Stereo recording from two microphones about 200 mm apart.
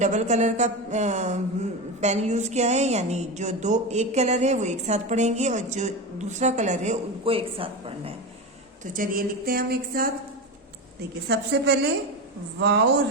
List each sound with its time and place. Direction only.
0.0 s a woman's voice: 35° right (ahead or behind)
8.9 s a woman's voice: 45° right (ahead or behind)
11.3 s a woman's voice: 55° right (ahead or behind)